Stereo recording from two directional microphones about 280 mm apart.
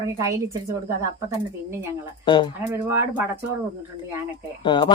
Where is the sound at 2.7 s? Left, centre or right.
Centre.